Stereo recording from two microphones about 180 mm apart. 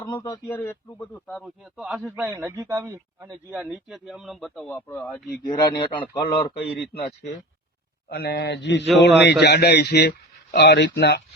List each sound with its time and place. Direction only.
0.0 s a man's voice: 20° left (ahead or behind); by 3.3 s 20° right (ahead or behind)
3.5 s a man's voice: 5° right (ahead or behind); by 5.2 s 10° left (ahead or behind)
5.4 s a man's voice: 25° left (ahead or behind)
6.4 s a man's voice: 65° left (ahead or behind)
8.1 s speech: 65° left (ahead or behind)